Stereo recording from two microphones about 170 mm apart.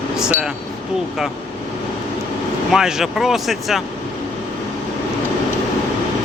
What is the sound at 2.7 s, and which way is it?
Speech, centre (ahead or behind).